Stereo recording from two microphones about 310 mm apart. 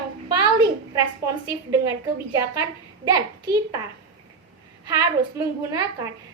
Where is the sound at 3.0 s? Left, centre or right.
Centre.